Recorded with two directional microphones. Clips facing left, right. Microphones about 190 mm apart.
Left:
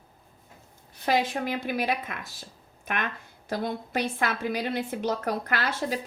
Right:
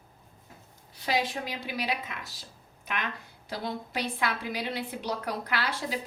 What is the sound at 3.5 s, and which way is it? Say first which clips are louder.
A woman's voice: left 5 dB; 50° left (ahead or behind).